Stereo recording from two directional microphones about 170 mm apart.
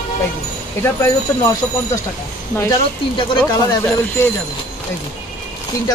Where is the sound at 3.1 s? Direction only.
25° left (ahead or behind).